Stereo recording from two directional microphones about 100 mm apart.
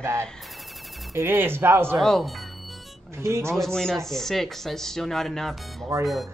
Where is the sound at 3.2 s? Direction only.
25° right (ahead or behind).